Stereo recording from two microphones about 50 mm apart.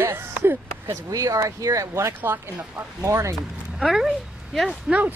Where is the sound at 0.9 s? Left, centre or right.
Right.